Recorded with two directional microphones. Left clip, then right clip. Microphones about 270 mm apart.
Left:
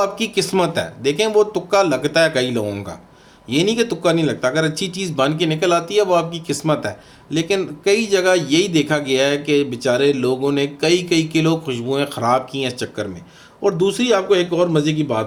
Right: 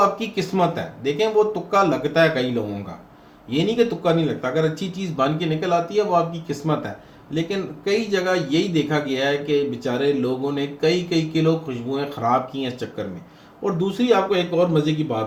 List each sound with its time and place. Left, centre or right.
0.0 s speech: left
3.5 s speech: left